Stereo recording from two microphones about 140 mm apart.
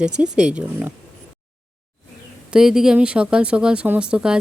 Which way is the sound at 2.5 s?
5° right (ahead or behind).